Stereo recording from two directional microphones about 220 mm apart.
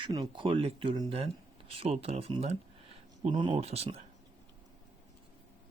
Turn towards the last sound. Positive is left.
turn(degrees=-25)  # may be behind; listen again after turning